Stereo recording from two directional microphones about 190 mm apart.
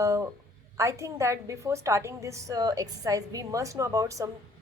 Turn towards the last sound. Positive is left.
turn(degrees=-15)  # may be behind; listen again after turning